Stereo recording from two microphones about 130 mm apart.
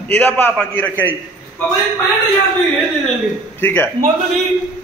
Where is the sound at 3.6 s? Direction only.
15° left (ahead or behind).